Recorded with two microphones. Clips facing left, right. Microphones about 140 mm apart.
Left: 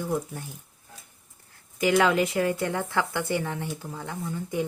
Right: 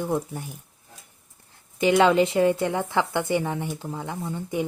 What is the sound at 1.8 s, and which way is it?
A woman's voice, 25° right (ahead or behind).